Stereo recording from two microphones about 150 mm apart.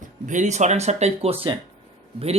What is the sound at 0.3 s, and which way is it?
Speech, 55° right (ahead or behind).